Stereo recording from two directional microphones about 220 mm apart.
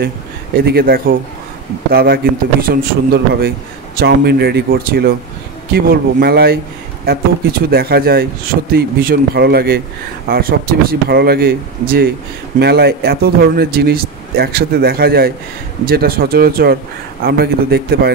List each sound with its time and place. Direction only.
0.6 s speech: 45° right (ahead or behind)